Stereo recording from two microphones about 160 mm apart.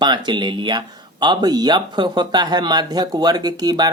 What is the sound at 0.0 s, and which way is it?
Speech, 25° right (ahead or behind).